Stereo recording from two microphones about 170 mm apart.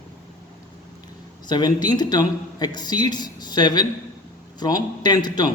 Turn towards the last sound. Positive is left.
turn(degrees=25)  # may be behind; listen again after turning